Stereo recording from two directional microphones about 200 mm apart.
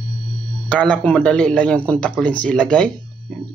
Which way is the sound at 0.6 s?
5° left (ahead or behind).